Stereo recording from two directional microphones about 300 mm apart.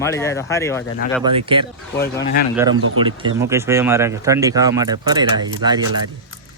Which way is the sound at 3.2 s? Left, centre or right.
Centre.